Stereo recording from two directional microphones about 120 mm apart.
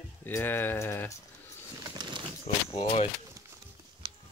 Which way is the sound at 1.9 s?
40° right (ahead or behind).